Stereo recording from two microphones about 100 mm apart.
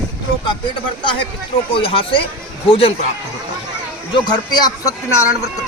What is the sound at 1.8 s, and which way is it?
Speech, 65° left (ahead or behind).